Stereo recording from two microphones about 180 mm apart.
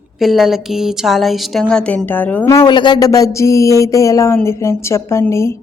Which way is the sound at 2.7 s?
25° left (ahead or behind).